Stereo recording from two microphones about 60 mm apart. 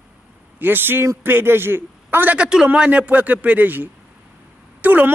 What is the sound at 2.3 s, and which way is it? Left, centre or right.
A man's voice, centre.